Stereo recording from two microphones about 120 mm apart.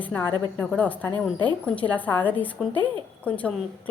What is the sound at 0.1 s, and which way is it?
A woman's voice, 15° left (ahead or behind).